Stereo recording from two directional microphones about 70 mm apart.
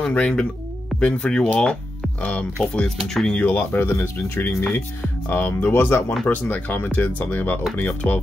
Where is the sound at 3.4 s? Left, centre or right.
Left.